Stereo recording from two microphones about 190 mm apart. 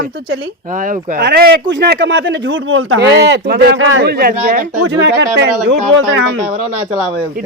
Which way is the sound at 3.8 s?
75° right (ahead or behind).